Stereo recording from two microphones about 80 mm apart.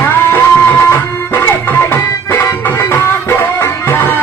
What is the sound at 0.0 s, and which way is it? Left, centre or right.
Music, left.